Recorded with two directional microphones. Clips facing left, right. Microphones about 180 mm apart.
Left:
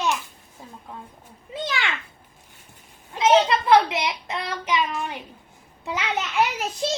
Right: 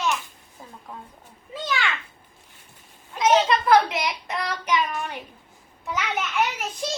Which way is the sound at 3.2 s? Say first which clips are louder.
Left 1 dB; 25° left (ahead or behind).